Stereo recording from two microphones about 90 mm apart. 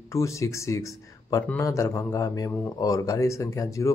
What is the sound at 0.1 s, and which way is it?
Speech, 35° left (ahead or behind).